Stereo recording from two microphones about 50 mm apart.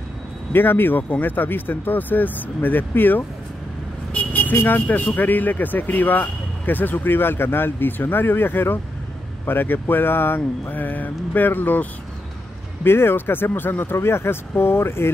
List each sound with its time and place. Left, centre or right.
0.5 s speech: left
4.1 s vehicle: left
4.6 s speech: left
12.8 s speech: left
13.9 s speech: left